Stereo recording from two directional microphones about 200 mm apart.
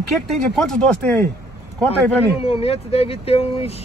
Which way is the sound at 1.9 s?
30° left (ahead or behind).